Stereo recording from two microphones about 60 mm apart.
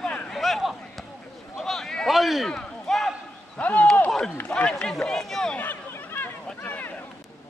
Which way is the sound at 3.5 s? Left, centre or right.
Left.